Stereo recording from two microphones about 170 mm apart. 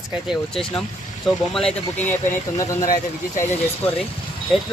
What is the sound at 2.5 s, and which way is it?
Speech, 20° left (ahead or behind).